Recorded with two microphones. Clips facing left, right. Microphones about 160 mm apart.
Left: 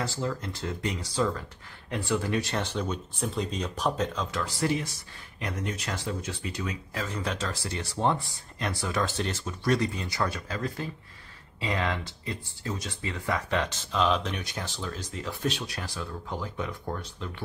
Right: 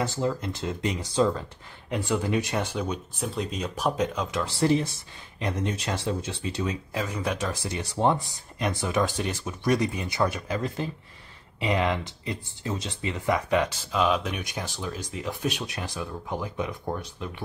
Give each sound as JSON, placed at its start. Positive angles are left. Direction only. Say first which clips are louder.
{"t": 0.0, "sound": "speech", "louder": "right 4 dB", "side_deg": -20}